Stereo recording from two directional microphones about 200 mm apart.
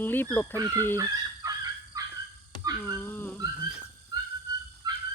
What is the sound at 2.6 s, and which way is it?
Dog, 15° right (ahead or behind).